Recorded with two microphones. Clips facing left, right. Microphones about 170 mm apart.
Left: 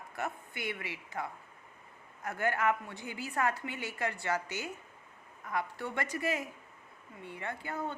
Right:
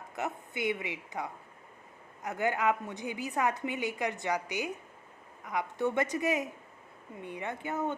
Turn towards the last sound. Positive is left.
turn(degrees=-20)  # may be behind; listen again after turning